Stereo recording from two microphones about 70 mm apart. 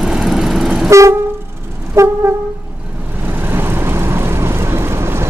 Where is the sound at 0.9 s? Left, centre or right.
Right.